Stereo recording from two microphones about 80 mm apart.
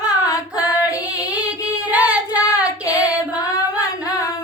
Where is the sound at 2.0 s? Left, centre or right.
Centre.